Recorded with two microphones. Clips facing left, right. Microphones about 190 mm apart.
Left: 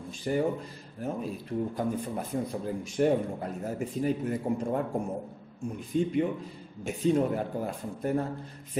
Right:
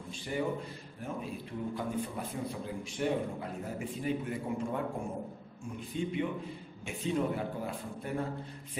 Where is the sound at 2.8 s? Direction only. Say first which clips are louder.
Left 7 dB; 45° left (ahead or behind).